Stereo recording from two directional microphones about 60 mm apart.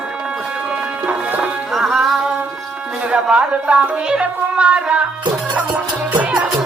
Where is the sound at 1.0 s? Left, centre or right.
Right.